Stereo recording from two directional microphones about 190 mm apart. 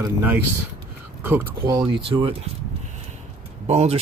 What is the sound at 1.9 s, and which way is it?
Speech, 25° right (ahead or behind).